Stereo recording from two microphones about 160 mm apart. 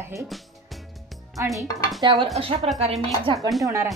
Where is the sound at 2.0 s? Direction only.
30° right (ahead or behind).